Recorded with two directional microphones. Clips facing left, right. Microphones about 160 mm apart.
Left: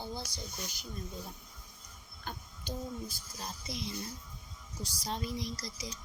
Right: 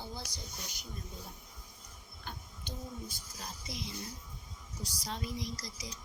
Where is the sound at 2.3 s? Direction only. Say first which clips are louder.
Left 4 dB; 45° left (ahead or behind).